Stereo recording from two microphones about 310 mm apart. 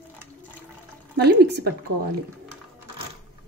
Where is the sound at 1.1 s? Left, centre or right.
Right.